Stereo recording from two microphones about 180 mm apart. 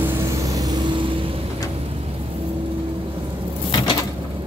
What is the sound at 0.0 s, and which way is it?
Vehicle, 15° right (ahead or behind).